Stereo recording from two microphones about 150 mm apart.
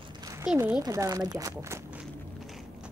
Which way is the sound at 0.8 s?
25° right (ahead or behind).